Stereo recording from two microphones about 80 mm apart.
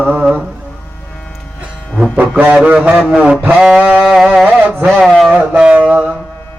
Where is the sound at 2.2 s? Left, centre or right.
Right.